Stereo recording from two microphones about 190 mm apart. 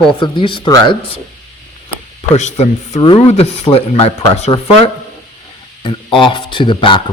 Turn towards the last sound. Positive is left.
turn(degrees=25)  # may be behind; listen again after turning